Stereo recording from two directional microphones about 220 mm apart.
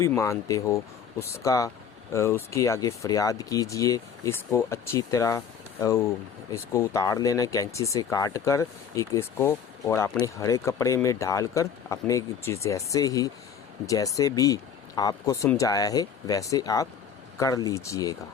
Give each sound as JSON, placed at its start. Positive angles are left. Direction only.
{"t": 0.0, "sound": "speech", "side_deg": 15}
{"t": 6.5, "sound": "speech", "side_deg": 15}